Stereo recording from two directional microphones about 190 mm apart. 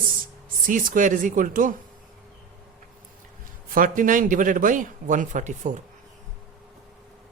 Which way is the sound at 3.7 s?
45° right (ahead or behind).